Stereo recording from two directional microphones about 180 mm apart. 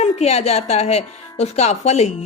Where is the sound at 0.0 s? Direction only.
35° left (ahead or behind).